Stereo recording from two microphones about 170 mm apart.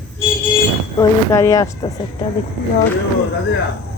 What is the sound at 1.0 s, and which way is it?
Speech, 20° left (ahead or behind).